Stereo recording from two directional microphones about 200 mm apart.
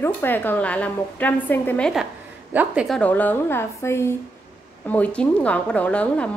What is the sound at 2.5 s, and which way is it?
Speech, 5° right (ahead or behind).